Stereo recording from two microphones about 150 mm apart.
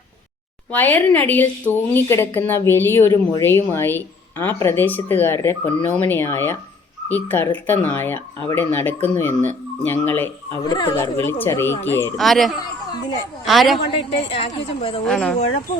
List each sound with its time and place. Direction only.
0.7 s speech: 10° left (ahead or behind)
10.7 s speech: 25° left (ahead or behind)
10.9 s speech: 15° left (ahead or behind)
12.1 s speech: centre (ahead or behind)
13.8 s a woman's voice: 35° left (ahead or behind)
15.0 s speech: 5° left (ahead or behind)